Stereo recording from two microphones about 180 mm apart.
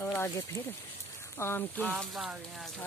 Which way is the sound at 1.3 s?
10° left (ahead or behind).